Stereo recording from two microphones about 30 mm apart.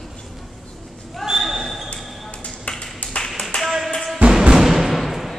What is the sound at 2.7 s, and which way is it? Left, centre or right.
Ping, left.